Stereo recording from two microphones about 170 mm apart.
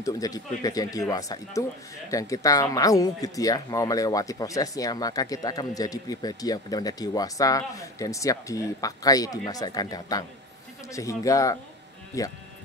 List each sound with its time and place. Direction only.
0.0 s speech: 20° left (ahead or behind)